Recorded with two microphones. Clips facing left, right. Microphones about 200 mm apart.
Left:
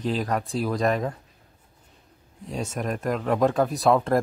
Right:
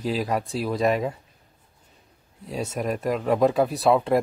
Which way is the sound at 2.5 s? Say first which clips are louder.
Right 2 dB; 5° right (ahead or behind).